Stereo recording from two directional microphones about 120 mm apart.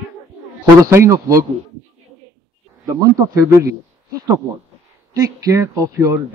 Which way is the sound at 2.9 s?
25° right (ahead or behind).